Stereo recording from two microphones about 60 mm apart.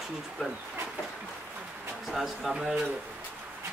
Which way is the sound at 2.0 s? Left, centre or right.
Centre.